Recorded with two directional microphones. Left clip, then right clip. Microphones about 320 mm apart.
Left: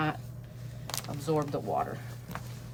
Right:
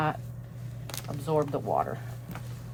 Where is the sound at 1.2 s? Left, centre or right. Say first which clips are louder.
Right 3 dB; centre.